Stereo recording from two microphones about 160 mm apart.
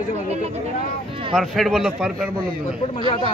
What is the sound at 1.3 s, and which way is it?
Speech, centre (ahead or behind).